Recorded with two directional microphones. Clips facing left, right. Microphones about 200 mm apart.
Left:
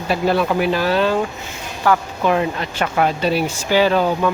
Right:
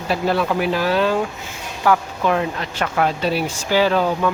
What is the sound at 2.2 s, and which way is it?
Speech, 10° left (ahead or behind).